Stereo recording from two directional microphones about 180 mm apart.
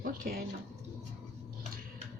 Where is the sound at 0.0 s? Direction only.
55° right (ahead or behind).